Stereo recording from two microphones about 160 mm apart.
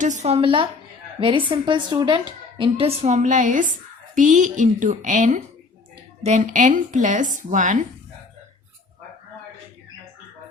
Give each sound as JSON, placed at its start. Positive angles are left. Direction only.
{"t": 0.0, "sound": "a woman's voice", "side_deg": -50}